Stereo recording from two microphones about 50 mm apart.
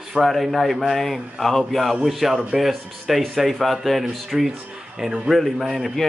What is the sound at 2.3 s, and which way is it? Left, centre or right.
Speech, right.